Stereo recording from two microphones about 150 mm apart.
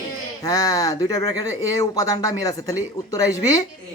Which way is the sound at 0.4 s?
25° left (ahead or behind).